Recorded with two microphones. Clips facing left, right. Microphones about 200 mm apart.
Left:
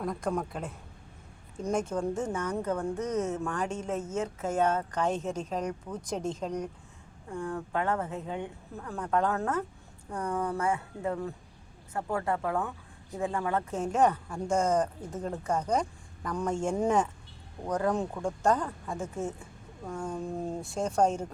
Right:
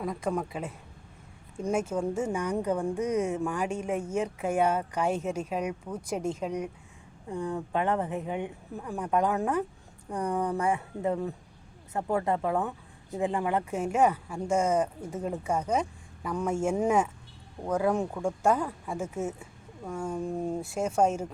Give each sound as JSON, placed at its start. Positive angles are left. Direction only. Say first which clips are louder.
{"t": 0.0, "sound": "a woman's voice", "louder": "right 1 dB", "side_deg": -5}